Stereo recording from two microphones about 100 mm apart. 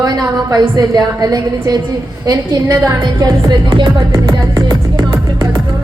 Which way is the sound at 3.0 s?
40° right (ahead or behind).